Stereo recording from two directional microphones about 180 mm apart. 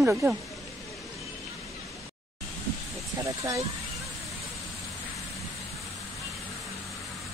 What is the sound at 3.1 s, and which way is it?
Speech, 20° right (ahead or behind).